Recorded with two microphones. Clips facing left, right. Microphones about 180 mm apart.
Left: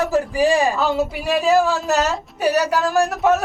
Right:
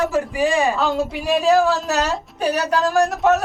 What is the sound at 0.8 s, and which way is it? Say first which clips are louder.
A woman's voice: left 1 dB; 5° left (ahead or behind).